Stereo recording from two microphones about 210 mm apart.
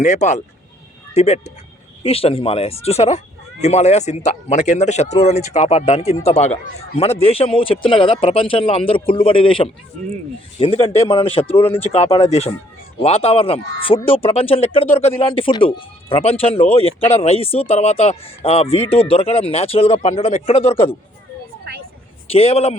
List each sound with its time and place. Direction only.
0.0 s speech: 35° left (ahead or behind)
22.3 s a man's voice: 30° left (ahead or behind)